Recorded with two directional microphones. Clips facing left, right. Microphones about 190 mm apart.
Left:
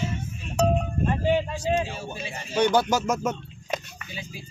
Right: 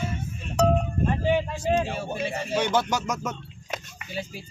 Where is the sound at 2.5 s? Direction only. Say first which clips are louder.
Left 4 dB; centre (ahead or behind).